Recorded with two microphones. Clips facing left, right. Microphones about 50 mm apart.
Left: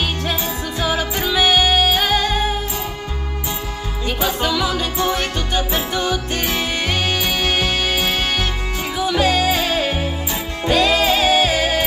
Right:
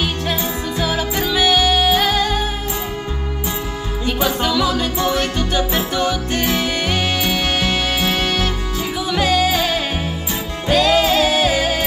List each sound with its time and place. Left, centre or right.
0.3 s music: centre
1.4 s music: left
4.4 s music: centre
5.0 s music: left
10.7 s music: centre
11.1 s music: left